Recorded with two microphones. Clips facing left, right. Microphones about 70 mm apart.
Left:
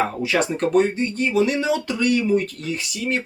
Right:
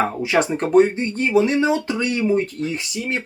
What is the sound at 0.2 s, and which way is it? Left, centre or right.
Speech, right.